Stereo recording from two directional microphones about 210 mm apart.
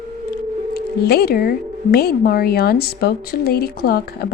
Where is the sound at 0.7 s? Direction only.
50° left (ahead or behind).